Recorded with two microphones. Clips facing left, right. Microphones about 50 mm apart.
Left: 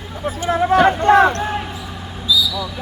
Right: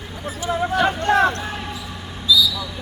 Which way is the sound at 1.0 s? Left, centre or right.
Left.